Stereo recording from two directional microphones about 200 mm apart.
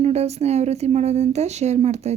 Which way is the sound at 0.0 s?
30° right (ahead or behind).